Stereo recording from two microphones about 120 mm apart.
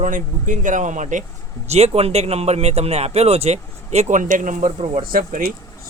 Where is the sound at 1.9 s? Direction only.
60° right (ahead or behind); by 4.7 s 90° right.